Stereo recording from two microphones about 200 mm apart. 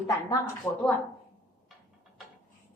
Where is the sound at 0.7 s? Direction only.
15° left (ahead or behind).